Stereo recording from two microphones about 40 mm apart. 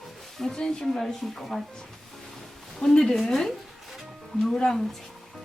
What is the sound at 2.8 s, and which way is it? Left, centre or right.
Speech, left.